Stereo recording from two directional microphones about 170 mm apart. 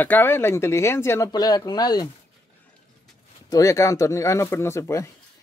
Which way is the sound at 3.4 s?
20° left (ahead or behind).